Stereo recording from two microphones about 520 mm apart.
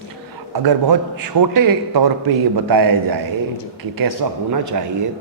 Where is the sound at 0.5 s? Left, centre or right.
Right.